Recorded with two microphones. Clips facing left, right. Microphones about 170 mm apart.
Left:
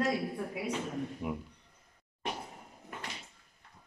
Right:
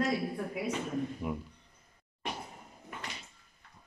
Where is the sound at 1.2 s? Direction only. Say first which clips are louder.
Right 1 dB; 15° left (ahead or behind).